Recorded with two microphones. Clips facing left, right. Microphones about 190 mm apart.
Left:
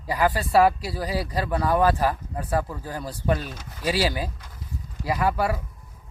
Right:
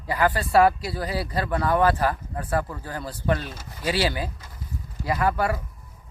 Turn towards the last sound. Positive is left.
turn(degrees=10)  # may be behind; listen again after turning